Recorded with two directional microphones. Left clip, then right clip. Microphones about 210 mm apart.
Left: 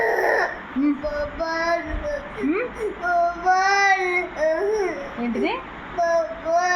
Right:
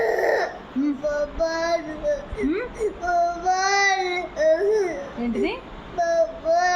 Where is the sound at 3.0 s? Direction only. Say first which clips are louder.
Left 2 dB; 10° right (ahead or behind).